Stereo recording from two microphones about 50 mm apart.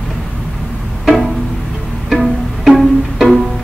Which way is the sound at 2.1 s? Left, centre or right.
Centre.